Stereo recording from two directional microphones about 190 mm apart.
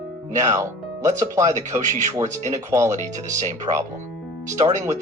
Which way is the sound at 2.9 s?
40° right (ahead or behind).